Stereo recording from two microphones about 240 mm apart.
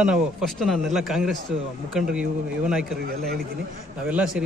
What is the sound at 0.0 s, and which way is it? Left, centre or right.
Speech, centre.